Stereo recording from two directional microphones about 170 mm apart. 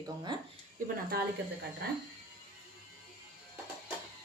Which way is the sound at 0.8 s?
65° right (ahead or behind).